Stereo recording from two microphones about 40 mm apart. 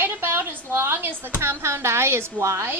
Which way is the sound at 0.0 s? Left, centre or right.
Right.